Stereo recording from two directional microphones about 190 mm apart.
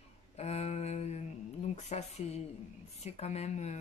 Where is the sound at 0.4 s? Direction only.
35° left (ahead or behind).